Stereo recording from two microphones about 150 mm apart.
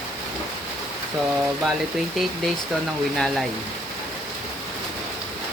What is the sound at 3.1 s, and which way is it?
Speech, centre (ahead or behind).